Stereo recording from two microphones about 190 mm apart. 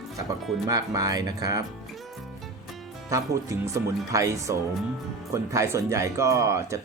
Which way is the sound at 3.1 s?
15° right (ahead or behind).